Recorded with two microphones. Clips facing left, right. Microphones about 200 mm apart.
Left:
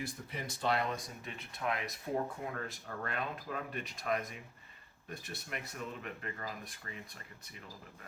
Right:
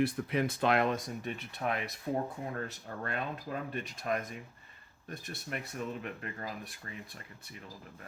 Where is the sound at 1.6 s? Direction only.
40° right (ahead or behind).